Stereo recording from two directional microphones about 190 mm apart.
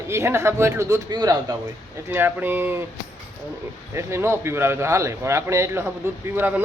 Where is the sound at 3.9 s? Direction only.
15° right (ahead or behind).